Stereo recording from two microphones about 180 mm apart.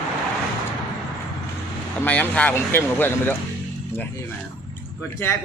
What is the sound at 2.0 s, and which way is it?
Speech, 5° left (ahead or behind).